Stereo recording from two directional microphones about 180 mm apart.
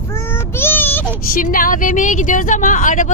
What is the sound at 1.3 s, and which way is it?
A woman's voice, 50° left (ahead or behind).